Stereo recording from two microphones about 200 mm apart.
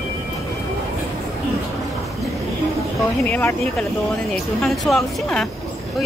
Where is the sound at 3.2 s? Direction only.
10° left (ahead or behind).